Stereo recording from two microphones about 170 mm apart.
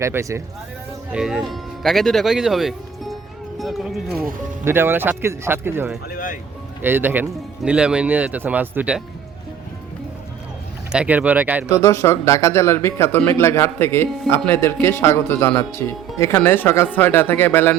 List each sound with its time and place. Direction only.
0.0 s speech: 15° right (ahead or behind)
1.1 s speech: 5° right (ahead or behind)
4.6 s speech: 15° right (ahead or behind)
6.1 s speech: 50° left (ahead or behind)
6.8 s speech: 10° right (ahead or behind)
10.9 s speech: 10° right (ahead or behind)
11.7 s speech: 15° left (ahead or behind)